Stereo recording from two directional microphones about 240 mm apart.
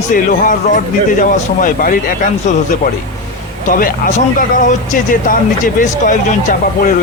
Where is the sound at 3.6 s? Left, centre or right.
Left.